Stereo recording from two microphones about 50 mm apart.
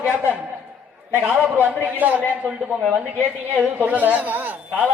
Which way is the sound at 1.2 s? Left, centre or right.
Right.